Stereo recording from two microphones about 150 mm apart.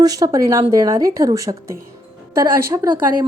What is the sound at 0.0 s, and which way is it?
A woman's voice, 25° right (ahead or behind).